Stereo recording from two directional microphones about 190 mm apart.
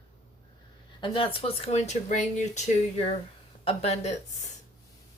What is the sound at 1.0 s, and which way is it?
Speech, 25° left (ahead or behind).